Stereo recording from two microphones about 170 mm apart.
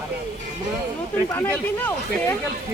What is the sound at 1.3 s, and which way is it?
Speech, 15° left (ahead or behind).